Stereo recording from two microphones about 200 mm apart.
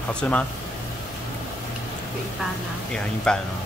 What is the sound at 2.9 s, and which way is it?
Speech, 5° left (ahead or behind).